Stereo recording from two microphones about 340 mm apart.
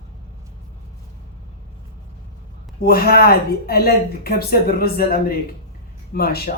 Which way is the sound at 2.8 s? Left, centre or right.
Left.